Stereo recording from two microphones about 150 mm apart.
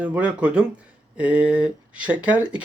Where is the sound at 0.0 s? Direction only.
10° right (ahead or behind).